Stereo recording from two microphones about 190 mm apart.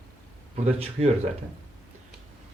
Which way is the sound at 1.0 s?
35° right (ahead or behind).